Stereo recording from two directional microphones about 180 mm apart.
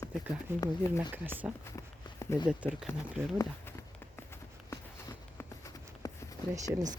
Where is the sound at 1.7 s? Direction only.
15° left (ahead or behind).